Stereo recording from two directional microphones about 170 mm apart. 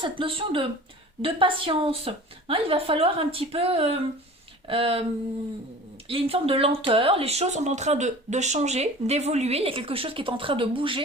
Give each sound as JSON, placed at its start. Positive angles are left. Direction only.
{"t": 0.0, "sound": "speech", "side_deg": -30}
{"t": 6.1, "sound": "speech", "side_deg": -35}